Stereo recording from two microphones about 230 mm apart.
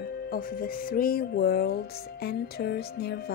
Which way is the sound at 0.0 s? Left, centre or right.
Left.